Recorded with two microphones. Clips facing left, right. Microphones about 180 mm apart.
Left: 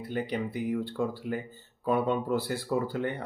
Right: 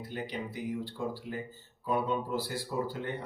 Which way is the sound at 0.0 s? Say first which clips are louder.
Left 6 dB; 60° left (ahead or behind).